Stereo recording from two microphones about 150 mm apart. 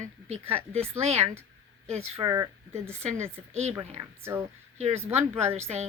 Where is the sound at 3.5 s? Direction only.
45° right (ahead or behind).